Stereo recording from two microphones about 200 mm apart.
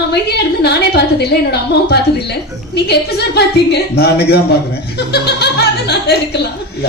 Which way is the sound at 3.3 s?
55° left (ahead or behind).